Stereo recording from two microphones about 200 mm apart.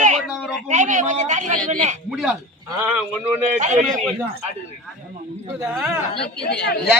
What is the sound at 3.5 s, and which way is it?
Speech, 35° right (ahead or behind).